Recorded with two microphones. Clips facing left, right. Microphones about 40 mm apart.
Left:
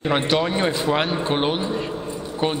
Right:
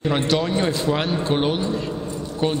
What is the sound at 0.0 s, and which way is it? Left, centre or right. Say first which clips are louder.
A man's voice: left 1 dB; centre.